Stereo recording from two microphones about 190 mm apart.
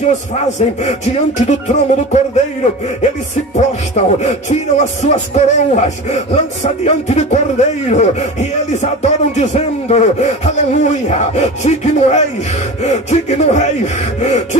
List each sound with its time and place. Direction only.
0.4 s speech: 35° left (ahead or behind)
3.5 s speech: 35° left (ahead or behind)